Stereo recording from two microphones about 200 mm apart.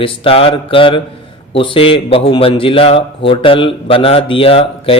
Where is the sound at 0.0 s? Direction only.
25° left (ahead or behind).